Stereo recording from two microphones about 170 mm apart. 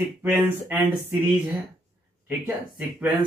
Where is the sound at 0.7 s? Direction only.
15° right (ahead or behind).